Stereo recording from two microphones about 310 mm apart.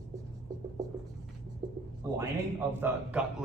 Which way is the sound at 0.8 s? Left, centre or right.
Centre.